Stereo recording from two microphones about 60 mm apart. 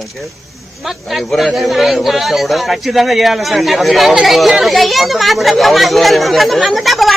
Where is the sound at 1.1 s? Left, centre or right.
Centre.